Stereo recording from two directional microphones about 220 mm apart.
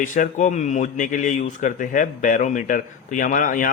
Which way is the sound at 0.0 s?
35° left (ahead or behind).